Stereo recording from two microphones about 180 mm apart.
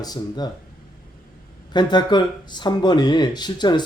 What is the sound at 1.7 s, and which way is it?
Speech, 25° left (ahead or behind).